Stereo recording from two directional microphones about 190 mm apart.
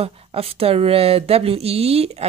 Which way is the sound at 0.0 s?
30° right (ahead or behind).